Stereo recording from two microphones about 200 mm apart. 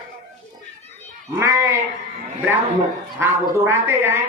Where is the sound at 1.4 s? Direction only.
10° right (ahead or behind).